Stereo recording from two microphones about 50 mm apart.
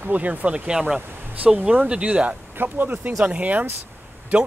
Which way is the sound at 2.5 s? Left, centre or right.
Right.